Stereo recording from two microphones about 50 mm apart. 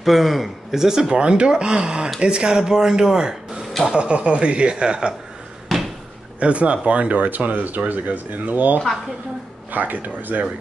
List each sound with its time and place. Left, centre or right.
0.0 s speech: centre
5.7 s a sound: centre
6.4 s speech: right